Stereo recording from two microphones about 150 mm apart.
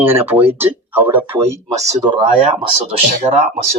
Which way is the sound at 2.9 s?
45° right (ahead or behind).